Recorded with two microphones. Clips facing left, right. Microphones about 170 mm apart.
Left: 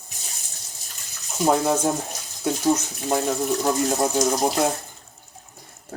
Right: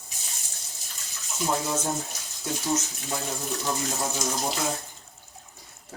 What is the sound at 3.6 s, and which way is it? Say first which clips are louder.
Speech: left 7 dB; 60° left (ahead or behind).